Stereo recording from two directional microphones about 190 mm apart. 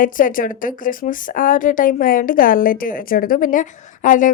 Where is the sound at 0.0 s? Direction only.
45° left (ahead or behind).